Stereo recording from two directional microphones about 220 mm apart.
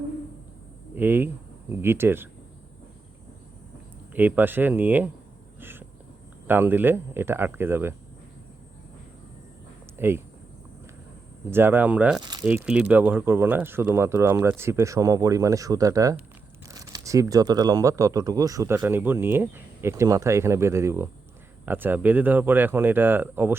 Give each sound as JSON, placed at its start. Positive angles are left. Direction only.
{"t": 0.9, "sound": "speech", "side_deg": -10}
{"t": 4.1, "sound": "speech", "side_deg": -10}
{"t": 5.5, "sound": "a sound", "side_deg": -10}
{"t": 6.5, "sound": "speech", "side_deg": -10}
{"t": 10.0, "sound": "speech", "side_deg": -10}
{"t": 11.5, "sound": "speech", "side_deg": -10}
{"t": 12.2, "sound": "speech", "side_deg": -20}
{"t": 12.5, "sound": "speech", "side_deg": -5}